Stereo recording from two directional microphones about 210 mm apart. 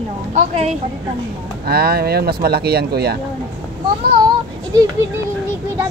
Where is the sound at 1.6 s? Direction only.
45° right (ahead or behind).